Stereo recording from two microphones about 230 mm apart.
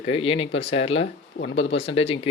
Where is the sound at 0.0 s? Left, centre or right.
Left.